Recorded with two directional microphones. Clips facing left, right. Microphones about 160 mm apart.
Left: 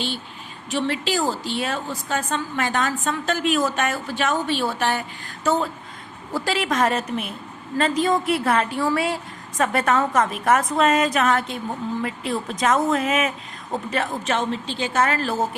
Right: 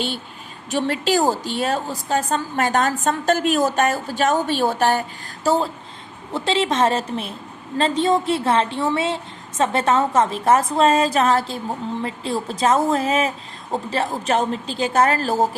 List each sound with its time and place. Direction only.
0.7 s a woman's voice: 45° right (ahead or behind)